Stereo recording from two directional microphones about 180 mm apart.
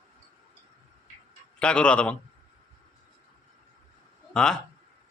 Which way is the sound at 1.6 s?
5° left (ahead or behind).